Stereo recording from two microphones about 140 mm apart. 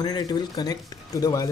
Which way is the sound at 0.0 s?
30° left (ahead or behind).